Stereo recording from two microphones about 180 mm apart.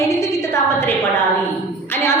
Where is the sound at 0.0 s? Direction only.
15° left (ahead or behind).